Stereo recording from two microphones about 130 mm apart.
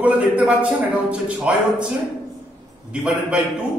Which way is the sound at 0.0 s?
10° right (ahead or behind).